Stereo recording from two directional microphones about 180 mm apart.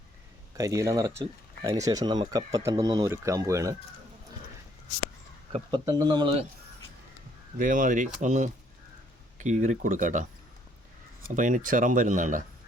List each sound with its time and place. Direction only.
0.5 s speech: 20° right (ahead or behind)
5.5 s speech: 30° right (ahead or behind)
5.8 s speech: 20° right (ahead or behind)
7.6 s speech: 50° right (ahead or behind)
11.3 s speech: 45° right (ahead or behind)